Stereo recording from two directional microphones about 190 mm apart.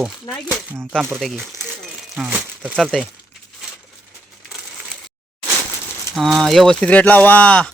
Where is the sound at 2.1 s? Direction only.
5° right (ahead or behind).